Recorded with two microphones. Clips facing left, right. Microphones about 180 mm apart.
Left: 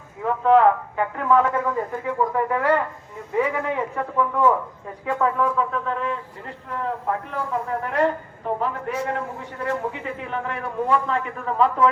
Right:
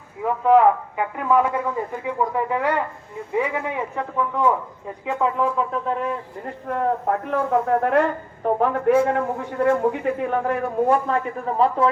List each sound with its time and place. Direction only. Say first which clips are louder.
0.4 s a man's voice: right 1 dB; 10° right (ahead or behind)
5.7 s speech: right 2 dB; 40° right (ahead or behind)
6.7 s a woman's voice: right 5 dB; 50° right (ahead or behind); by 11.9 s 35° right (ahead or behind)